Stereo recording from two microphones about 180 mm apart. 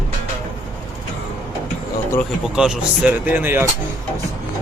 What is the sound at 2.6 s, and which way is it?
Speech, 5° right (ahead or behind).